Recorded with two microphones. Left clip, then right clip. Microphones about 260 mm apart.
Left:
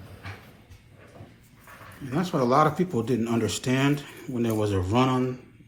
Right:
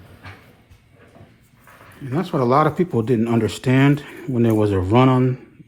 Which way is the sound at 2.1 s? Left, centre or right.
Right.